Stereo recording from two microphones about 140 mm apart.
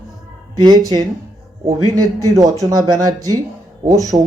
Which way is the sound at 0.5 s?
25° right (ahead or behind).